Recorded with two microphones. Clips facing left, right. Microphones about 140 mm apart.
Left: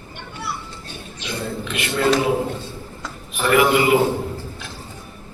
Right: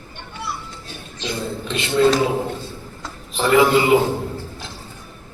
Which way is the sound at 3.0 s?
25° right (ahead or behind).